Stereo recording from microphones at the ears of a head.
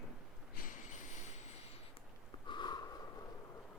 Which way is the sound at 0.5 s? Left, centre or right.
Left.